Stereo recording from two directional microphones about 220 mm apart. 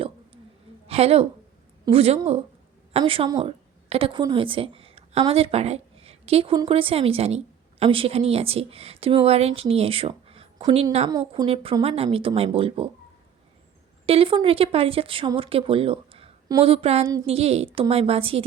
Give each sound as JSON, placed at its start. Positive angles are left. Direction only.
{"t": 0.9, "sound": "a woman's voice", "side_deg": -25}
{"t": 14.1, "sound": "speech", "side_deg": -25}